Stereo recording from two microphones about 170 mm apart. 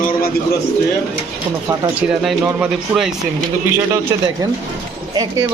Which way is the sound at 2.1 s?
5° right (ahead or behind).